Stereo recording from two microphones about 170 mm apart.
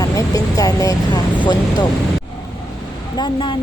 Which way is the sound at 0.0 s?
20° left (ahead or behind).